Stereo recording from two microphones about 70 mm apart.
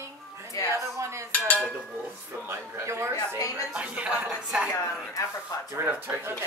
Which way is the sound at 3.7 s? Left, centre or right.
Centre.